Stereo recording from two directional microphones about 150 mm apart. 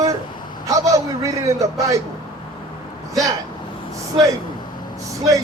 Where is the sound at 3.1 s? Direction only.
20° right (ahead or behind).